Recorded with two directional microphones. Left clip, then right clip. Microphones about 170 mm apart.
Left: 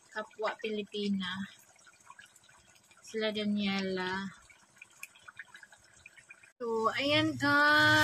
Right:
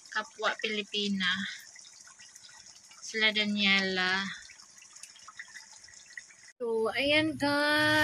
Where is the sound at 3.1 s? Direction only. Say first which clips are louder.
Right 6 dB; centre (ahead or behind).